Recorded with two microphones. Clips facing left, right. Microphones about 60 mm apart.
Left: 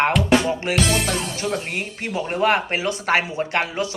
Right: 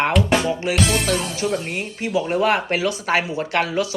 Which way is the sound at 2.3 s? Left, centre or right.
Left.